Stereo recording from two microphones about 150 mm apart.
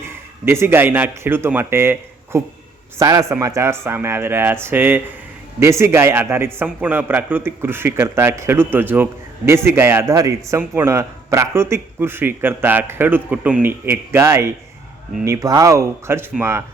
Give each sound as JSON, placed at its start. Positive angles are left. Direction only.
{"t": 0.0, "sound": "speech", "side_deg": -15}